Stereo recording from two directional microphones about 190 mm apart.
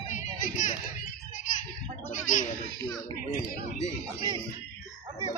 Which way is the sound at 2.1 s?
45° left (ahead or behind).